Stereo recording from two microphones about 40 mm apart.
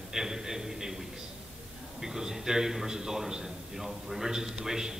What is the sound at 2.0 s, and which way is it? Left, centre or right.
A man's voice, centre.